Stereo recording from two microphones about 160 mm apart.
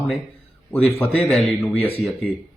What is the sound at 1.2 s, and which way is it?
Speech, centre (ahead or behind).